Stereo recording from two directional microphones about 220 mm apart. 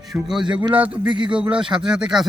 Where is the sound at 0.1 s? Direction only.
Centre (ahead or behind).